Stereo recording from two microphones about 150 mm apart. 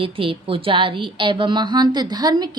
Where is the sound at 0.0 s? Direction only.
35° right (ahead or behind).